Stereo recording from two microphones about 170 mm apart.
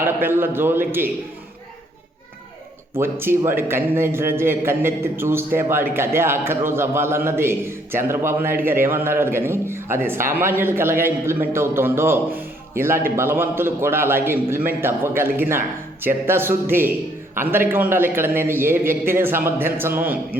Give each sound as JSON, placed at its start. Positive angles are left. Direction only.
{"t": 0.0, "sound": "a man's voice", "side_deg": -15}
{"t": 3.0, "sound": "a man's voice", "side_deg": -15}